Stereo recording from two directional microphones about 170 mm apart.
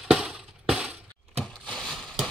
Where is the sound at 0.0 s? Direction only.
5° right (ahead or behind).